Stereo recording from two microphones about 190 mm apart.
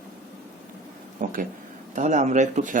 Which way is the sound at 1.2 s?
45° right (ahead or behind).